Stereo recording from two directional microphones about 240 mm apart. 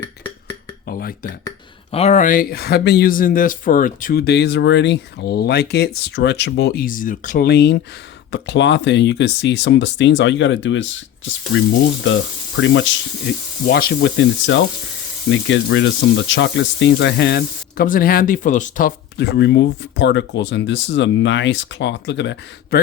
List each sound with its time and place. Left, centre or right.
0.9 s speech: left
1.5 s speech: left